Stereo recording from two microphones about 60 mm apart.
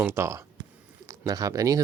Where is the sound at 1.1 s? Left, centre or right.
Right.